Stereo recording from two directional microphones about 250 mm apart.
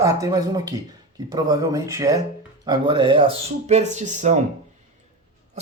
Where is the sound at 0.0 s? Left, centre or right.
Centre; by 4.4 s right.